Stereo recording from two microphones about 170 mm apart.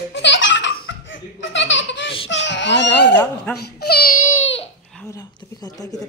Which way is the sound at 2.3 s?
90° left.